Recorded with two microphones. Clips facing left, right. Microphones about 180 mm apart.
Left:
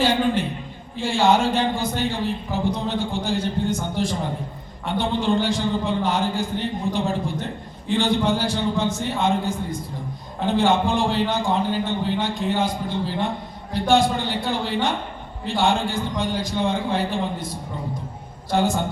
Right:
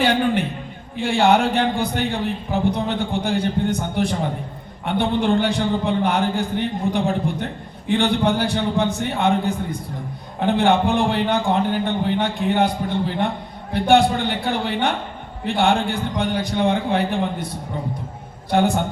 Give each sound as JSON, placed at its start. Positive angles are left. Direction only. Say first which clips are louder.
{"t": 0.0, "sound": "a man's voice", "louder": "right 1 dB", "side_deg": -60}
{"t": 18.5, "sound": "speech", "louder": "right 3 dB", "side_deg": -60}